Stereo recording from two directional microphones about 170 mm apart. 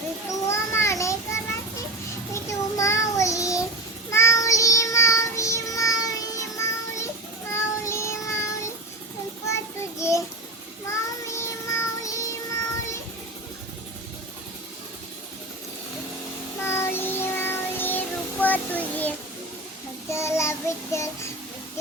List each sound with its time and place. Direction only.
0.4 s child singing: 15° left (ahead or behind)
6.6 s music: 15° left (ahead or behind)
7.5 s child singing: 15° left (ahead or behind)
10.0 s child singing: 15° left (ahead or behind)
16.6 s child singing: 15° left (ahead or behind)